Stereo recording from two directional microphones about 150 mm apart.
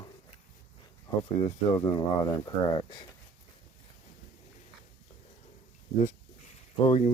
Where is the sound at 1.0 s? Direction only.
30° left (ahead or behind).